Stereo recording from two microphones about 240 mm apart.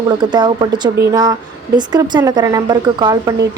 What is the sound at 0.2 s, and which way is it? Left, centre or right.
A woman's voice, centre.